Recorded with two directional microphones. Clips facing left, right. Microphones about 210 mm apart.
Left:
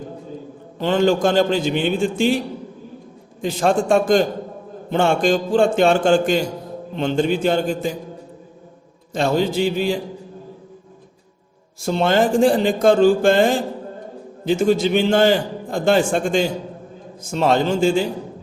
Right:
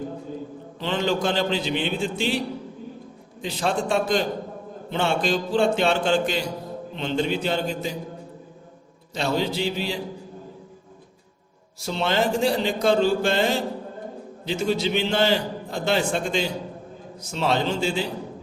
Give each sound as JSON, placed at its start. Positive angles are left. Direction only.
{"t": 0.8, "sound": "a man's voice", "side_deg": 45}
{"t": 3.4, "sound": "a man's voice", "side_deg": 45}
{"t": 9.1, "sound": "a man's voice", "side_deg": 50}
{"t": 11.8, "sound": "a man's voice", "side_deg": 50}